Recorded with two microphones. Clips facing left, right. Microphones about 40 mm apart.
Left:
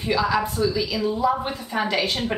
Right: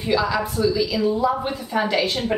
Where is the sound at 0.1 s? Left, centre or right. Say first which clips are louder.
Right 1 dB; centre.